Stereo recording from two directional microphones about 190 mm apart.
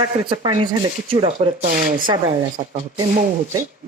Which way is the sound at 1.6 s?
45° right (ahead or behind).